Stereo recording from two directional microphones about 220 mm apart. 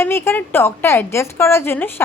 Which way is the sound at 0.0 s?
10° left (ahead or behind).